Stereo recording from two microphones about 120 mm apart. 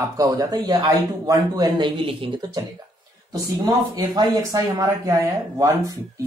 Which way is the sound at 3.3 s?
35° right (ahead or behind).